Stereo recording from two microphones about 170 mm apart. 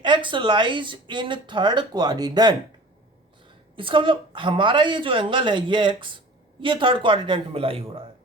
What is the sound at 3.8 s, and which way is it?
Speech, 30° right (ahead or behind).